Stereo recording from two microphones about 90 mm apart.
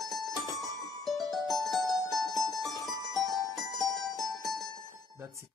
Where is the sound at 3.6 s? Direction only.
Centre (ahead or behind).